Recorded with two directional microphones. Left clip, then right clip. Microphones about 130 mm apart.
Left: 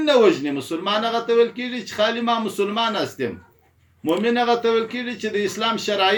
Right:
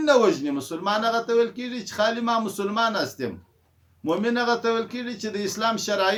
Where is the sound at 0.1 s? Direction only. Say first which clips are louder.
Left 3 dB; 40° right (ahead or behind).